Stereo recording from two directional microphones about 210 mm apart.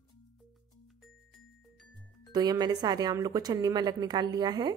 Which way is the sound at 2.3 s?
20° right (ahead or behind).